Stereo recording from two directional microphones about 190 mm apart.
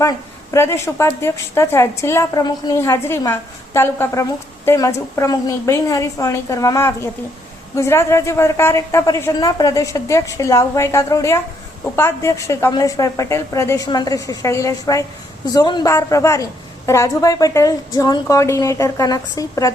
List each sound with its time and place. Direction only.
0.5 s a woman's voice: 15° left (ahead or behind)